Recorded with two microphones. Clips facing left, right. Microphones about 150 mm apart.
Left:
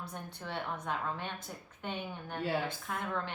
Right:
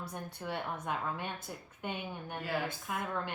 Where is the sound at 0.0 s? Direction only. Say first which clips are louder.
Right 2 dB; 10° right (ahead or behind).